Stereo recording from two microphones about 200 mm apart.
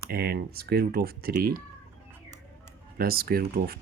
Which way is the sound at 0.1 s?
50° right (ahead or behind).